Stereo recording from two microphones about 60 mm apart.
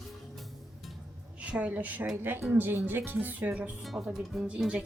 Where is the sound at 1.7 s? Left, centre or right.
Right.